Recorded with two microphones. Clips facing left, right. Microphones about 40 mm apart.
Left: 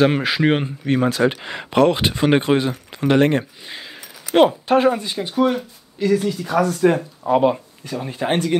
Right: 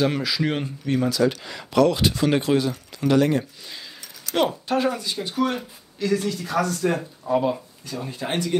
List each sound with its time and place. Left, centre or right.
0.0 s speech: left; by 6.8 s centre
7.2 s speech: left
7.8 s speech: left